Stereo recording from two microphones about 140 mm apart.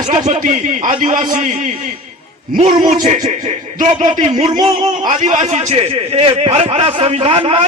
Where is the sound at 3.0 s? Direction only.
55° right (ahead or behind).